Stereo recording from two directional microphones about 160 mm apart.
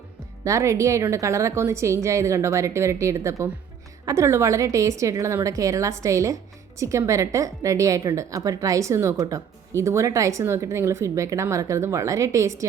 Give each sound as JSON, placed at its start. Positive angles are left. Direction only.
{"t": 0.4, "sound": "a woman's voice", "side_deg": -20}